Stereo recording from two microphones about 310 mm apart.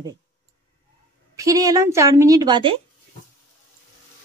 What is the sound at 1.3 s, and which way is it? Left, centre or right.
Speech, centre.